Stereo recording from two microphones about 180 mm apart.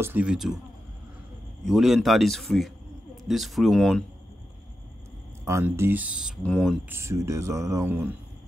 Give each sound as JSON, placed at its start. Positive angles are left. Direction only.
{"t": 0.0, "sound": "speech", "side_deg": -10}
{"t": 1.7, "sound": "speech", "side_deg": 0}
{"t": 5.4, "sound": "speech", "side_deg": -15}
{"t": 6.9, "sound": "speech", "side_deg": -15}